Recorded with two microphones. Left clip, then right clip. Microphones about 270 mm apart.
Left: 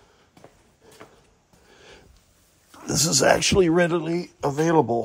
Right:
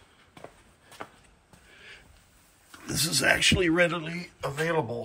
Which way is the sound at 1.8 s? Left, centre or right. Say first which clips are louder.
Even; centre.